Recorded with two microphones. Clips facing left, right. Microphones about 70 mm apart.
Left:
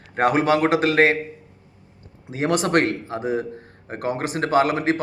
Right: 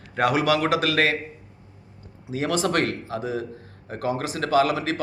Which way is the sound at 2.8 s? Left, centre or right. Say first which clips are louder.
Left 3 dB; left.